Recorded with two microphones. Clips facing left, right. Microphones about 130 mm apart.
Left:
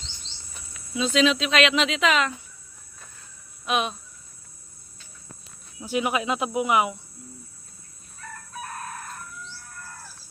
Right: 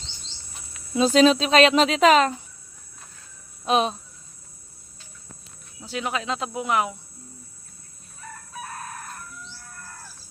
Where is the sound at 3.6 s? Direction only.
35° right (ahead or behind).